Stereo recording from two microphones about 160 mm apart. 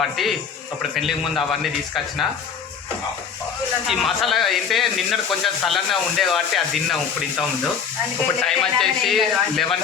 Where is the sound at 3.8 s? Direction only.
Centre (ahead or behind).